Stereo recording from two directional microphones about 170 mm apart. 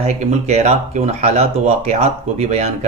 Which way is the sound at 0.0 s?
40° right (ahead or behind).